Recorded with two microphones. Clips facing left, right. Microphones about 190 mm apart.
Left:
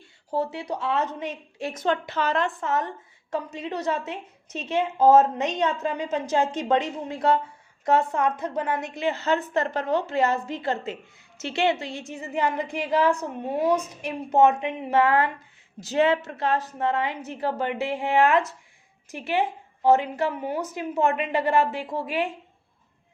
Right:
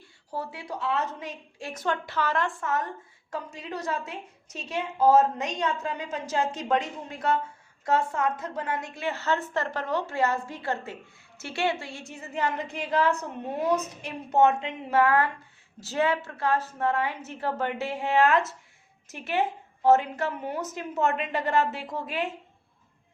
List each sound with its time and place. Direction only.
0.3 s a woman's voice: 20° left (ahead or behind)
14.4 s a woman's voice: 15° left (ahead or behind)